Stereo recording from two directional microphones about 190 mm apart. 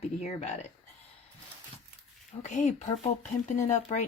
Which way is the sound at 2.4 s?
40° left (ahead or behind).